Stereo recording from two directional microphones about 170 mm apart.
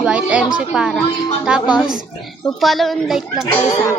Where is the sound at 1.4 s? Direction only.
5° right (ahead or behind).